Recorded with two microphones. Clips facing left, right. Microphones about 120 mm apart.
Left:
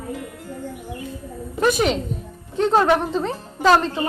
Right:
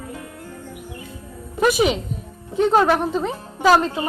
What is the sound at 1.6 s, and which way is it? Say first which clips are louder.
Speech: right 1 dB; 5° right (ahead or behind).